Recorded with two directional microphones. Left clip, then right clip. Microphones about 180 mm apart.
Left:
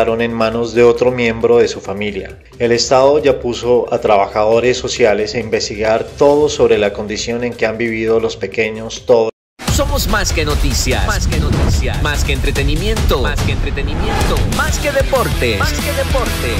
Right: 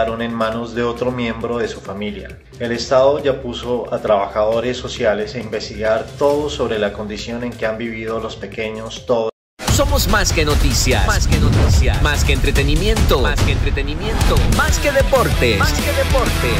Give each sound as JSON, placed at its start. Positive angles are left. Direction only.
{"t": 0.0, "sound": "speech", "side_deg": 35}
{"t": 9.7, "sound": "speech", "side_deg": 0}